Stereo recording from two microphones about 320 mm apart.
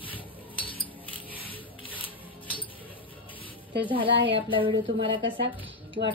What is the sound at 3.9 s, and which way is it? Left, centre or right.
Speech, centre.